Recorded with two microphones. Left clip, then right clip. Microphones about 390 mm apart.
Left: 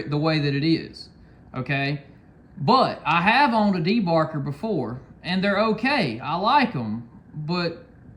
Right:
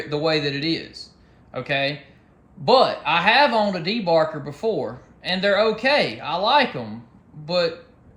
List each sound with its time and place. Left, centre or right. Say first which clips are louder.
0.1 s speech: right 2 dB; centre